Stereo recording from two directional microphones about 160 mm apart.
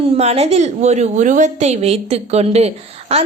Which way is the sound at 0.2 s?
40° right (ahead or behind).